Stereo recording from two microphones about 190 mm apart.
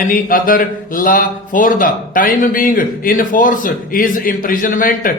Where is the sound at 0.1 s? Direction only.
45° left (ahead or behind).